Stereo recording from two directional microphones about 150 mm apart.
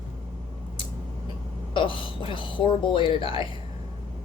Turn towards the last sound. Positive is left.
turn(degrees=35)  # may be behind; listen again after turning